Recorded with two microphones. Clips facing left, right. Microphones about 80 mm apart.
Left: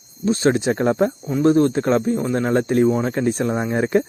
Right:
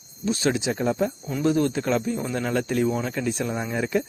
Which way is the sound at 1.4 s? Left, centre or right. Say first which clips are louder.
Left 7 dB; left.